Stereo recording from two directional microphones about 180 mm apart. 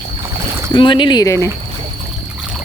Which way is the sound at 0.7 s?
25° left (ahead or behind).